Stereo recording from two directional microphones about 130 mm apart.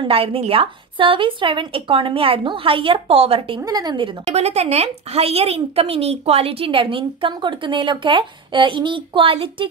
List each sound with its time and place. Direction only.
0.0 s a woman's voice: 45° right (ahead or behind)
3.6 s speech: 30° right (ahead or behind)
4.3 s a woman's voice: 55° right (ahead or behind)